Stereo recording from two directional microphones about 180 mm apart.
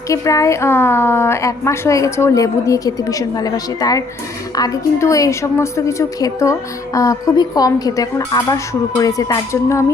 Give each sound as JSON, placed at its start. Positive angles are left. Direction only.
{"t": 0.1, "sound": "a woman's voice", "side_deg": 15}